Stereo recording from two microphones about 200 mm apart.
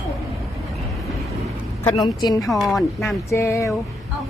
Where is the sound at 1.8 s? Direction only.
20° left (ahead or behind).